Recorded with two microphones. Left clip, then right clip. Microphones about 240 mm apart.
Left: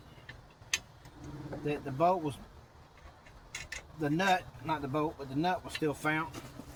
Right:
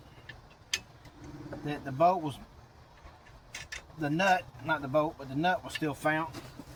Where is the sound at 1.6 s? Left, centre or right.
Centre.